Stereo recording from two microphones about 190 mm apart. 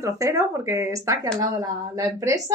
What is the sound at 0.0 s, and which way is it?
A woman's voice, 15° right (ahead or behind).